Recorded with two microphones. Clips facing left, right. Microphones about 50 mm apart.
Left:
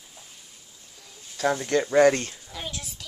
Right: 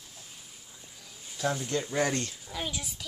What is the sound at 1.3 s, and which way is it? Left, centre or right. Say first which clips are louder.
Speech: left 7 dB; left.